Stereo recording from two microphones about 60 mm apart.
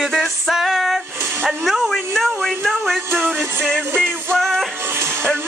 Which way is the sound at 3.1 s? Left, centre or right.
Right.